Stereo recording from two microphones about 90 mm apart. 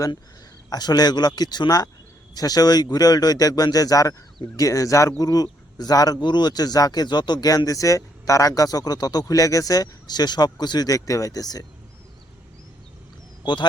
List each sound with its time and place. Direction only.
0.7 s speech: 50° left (ahead or behind)
7.4 s speech: 40° left (ahead or behind)
13.4 s speech: 55° left (ahead or behind)